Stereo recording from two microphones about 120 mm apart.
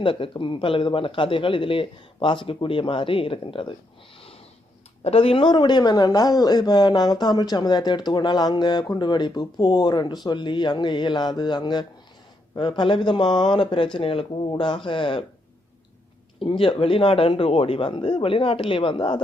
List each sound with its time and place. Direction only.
0.0 s speech: 45° left (ahead or behind)
5.0 s speech: 50° left (ahead or behind)
16.4 s speech: 45° left (ahead or behind)